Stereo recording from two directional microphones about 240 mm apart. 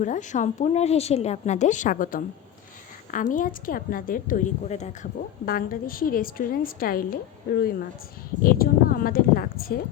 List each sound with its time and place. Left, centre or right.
0.0 s speech: left